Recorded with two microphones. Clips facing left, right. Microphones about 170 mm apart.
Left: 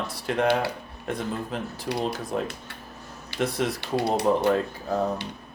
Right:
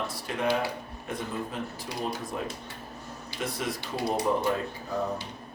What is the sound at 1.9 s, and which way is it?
Speech, 70° left (ahead or behind).